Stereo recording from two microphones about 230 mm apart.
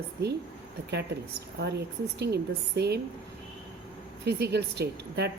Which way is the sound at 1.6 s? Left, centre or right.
Right.